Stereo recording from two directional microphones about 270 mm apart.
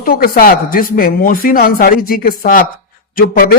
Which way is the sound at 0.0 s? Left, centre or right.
Left.